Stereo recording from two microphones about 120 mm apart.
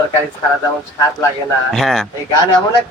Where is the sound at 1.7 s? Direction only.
Centre (ahead or behind).